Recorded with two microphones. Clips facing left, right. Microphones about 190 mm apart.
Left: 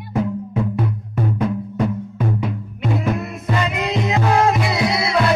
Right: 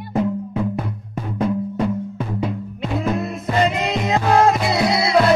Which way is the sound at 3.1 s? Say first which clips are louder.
Right 3 dB; 35° right (ahead or behind).